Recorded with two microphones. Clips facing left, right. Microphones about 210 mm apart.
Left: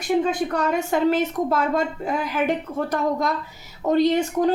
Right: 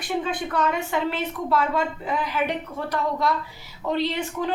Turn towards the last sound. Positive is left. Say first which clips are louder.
# left 7 dB
turn(degrees=45)  # may be behind; listen again after turning